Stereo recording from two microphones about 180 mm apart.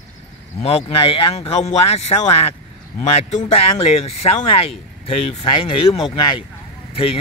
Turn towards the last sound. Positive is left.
turn(degrees=30)  # may be behind; listen again after turning